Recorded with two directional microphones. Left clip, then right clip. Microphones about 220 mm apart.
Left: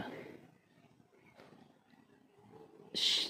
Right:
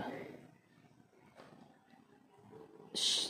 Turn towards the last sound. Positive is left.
turn(degrees=25)  # may be behind; listen again after turning